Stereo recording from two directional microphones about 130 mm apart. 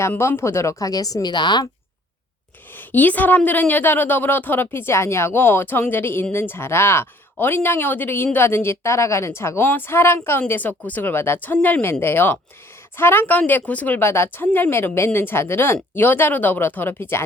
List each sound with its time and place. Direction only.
0.0 s speech: 20° left (ahead or behind); by 1.6 s 35° left (ahead or behind)
2.7 s speech: 15° left (ahead or behind)